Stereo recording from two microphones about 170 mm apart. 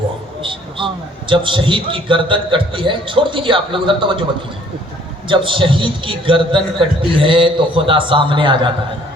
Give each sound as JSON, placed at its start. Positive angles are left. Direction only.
{"t": 0.8, "sound": "a man's voice", "side_deg": -30}
{"t": 5.3, "sound": "a man's voice", "side_deg": -30}